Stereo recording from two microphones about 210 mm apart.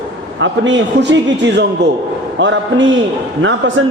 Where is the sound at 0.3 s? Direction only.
60° right (ahead or behind).